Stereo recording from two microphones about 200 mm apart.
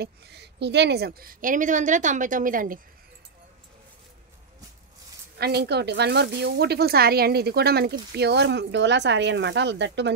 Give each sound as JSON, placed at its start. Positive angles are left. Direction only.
{"t": 0.0, "sound": "a woman's voice", "side_deg": -55}
{"t": 5.4, "sound": "a woman's voice", "side_deg": -55}